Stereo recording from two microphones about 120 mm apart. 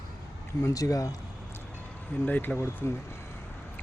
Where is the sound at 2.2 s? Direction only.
15° left (ahead or behind).